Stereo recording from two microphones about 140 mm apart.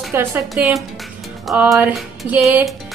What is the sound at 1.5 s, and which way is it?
Speech, 10° right (ahead or behind).